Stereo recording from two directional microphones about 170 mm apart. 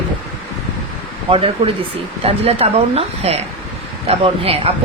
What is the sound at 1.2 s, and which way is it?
Speech, 35° right (ahead or behind).